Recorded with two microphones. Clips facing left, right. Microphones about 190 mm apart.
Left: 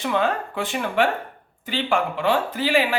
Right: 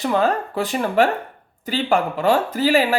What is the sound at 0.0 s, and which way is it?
Speech, 40° right (ahead or behind).